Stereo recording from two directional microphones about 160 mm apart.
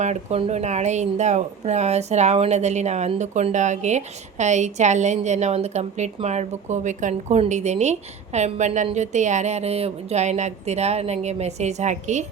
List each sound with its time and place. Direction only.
0.0 s speech: 45° right (ahead or behind)